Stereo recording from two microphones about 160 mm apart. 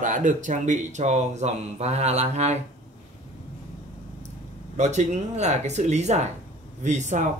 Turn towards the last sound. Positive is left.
turn(degrees=-50)  # may be behind; listen again after turning